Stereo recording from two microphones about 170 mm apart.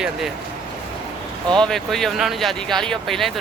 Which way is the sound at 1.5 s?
5° left (ahead or behind).